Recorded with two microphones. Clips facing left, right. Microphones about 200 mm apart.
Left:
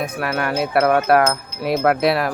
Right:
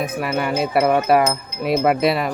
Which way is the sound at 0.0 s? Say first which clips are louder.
Right 1 dB; centre (ahead or behind).